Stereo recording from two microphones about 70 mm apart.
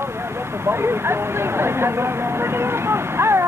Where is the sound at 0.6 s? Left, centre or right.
Right.